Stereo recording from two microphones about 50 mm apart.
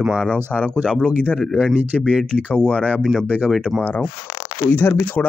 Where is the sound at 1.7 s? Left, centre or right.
Right.